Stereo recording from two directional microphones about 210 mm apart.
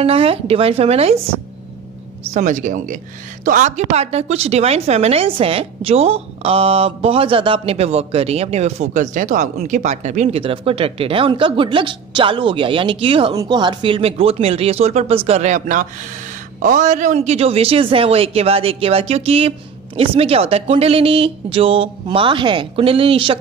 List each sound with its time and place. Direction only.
0.0 s a woman's voice: 30° right (ahead or behind)
2.3 s a woman's voice: 35° right (ahead or behind)